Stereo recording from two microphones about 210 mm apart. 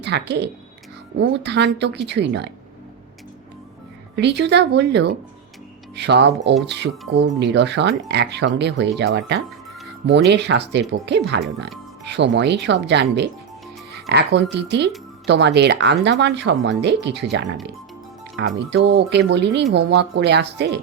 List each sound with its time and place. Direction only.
0.0 s speech: 55° right (ahead or behind)
4.1 s speech: 55° right (ahead or behind)
18.3 s speech: 55° right (ahead or behind)